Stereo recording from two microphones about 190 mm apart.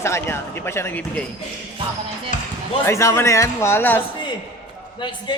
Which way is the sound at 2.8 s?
15° left (ahead or behind).